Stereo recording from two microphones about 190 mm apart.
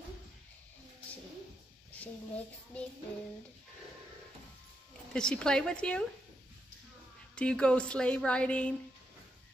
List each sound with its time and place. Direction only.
1.9 s a child's voice: 5° left (ahead or behind)
5.1 s a woman's voice: 5° left (ahead or behind)
7.3 s a woman's voice: 5° left (ahead or behind)